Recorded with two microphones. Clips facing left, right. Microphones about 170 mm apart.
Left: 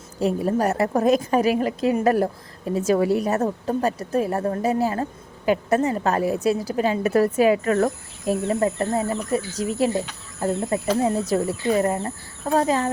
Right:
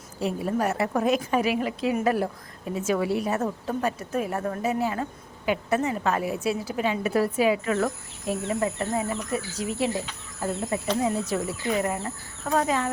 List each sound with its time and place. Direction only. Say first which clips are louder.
0.2 s a woman's voice: left 5 dB; 40° left (ahead or behind)
11.0 s a woman's voice: left 5 dB; 35° left (ahead or behind)